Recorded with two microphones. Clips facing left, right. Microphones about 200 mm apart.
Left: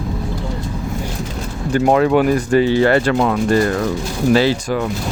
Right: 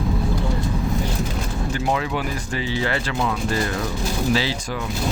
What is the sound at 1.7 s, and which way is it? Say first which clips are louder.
Speech: left 12 dB; 55° left (ahead or behind).